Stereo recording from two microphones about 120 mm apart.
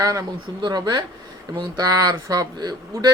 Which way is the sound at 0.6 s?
35° right (ahead or behind).